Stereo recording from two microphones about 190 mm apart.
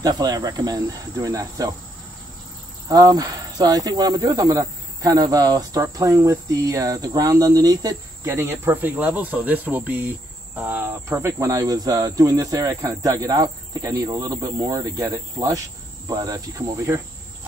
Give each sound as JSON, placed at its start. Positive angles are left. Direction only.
{"t": 0.0, "sound": "cricket", "side_deg": -20}
{"t": 2.9, "sound": "speech", "side_deg": -20}
{"t": 16.1, "sound": "cricket", "side_deg": -20}